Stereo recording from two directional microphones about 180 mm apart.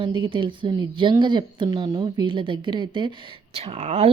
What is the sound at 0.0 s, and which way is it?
A woman's voice, 30° right (ahead or behind).